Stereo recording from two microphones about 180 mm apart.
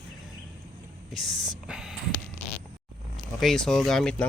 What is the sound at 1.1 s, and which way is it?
Speech, centre (ahead or behind).